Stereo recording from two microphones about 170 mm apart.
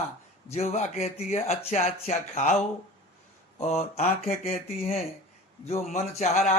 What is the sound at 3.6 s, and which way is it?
Speech, 40° left (ahead or behind).